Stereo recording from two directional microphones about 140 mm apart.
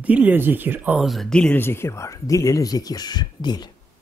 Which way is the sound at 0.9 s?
Centre (ahead or behind).